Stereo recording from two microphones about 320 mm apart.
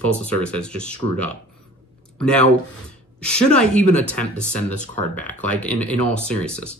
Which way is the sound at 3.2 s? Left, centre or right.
Centre.